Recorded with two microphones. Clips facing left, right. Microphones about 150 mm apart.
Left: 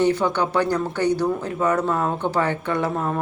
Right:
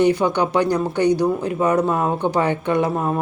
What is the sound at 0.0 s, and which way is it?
Speech, 15° right (ahead or behind).